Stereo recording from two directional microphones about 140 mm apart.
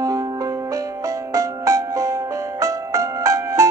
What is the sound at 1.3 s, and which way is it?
Music, 20° right (ahead or behind).